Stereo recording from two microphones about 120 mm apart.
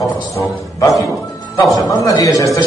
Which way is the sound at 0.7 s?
25° left (ahead or behind).